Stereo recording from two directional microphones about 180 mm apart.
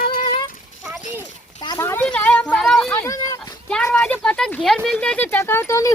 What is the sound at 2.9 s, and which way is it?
Speech, 15° left (ahead or behind).